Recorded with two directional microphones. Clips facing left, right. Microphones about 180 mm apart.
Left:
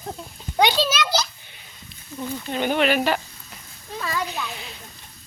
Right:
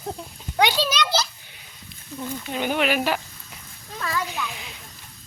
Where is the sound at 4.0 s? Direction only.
10° left (ahead or behind).